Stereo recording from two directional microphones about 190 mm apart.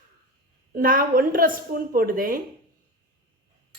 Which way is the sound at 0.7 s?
50° right (ahead or behind).